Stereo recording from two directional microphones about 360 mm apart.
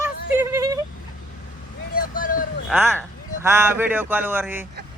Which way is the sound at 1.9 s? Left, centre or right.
Left.